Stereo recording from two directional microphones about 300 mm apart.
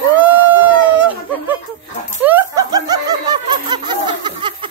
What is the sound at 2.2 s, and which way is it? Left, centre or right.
Snicker, centre.